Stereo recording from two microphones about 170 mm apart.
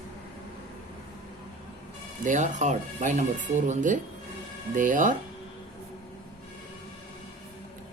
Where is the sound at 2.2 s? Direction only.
45° right (ahead or behind).